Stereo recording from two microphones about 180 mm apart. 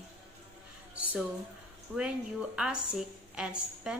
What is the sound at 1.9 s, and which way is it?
A woman's voice, 5° right (ahead or behind).